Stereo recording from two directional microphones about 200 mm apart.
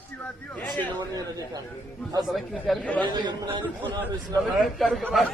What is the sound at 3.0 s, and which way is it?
Speech, 20° right (ahead or behind).